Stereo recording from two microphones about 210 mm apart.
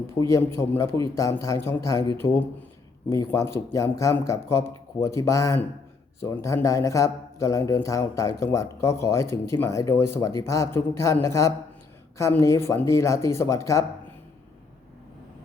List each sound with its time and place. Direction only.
0.2 s speech: 15° left (ahead or behind)